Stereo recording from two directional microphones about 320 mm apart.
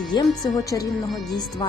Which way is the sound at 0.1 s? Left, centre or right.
Centre.